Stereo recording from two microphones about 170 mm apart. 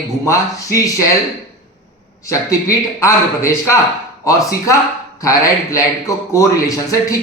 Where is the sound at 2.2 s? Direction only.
20° left (ahead or behind).